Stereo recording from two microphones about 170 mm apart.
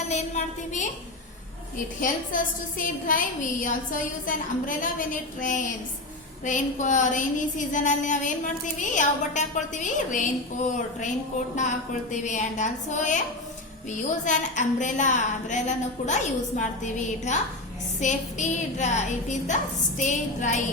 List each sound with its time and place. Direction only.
0.1 s a woman's voice: 40° left (ahead or behind)
2.0 s a woman's voice: 55° left (ahead or behind)
12.1 s a woman's voice: 45° left (ahead or behind)
14.3 s a woman's voice: 45° left (ahead or behind)